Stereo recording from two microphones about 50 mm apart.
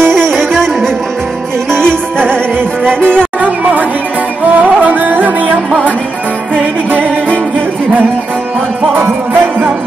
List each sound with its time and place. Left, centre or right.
0.0 s music: centre
2.1 s music: right
3.0 s music: centre
3.3 s music: right
8.9 s music: right